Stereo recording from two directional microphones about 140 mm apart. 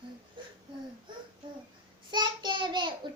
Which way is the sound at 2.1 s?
35° right (ahead or behind).